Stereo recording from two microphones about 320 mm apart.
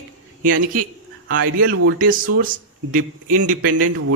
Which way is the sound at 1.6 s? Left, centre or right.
Right.